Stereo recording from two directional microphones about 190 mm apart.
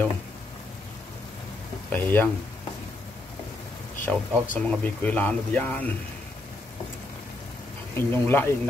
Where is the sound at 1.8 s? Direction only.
10° left (ahead or behind).